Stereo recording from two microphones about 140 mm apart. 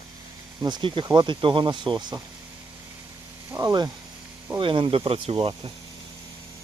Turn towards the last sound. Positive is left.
turn(degrees=-40)  # may be behind; listen again after turning